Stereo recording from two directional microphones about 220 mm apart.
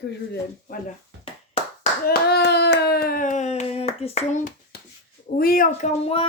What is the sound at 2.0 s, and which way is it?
Speech, 45° left (ahead or behind).